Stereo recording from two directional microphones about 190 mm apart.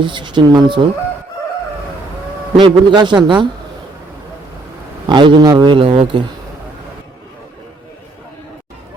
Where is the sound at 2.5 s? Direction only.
25° right (ahead or behind).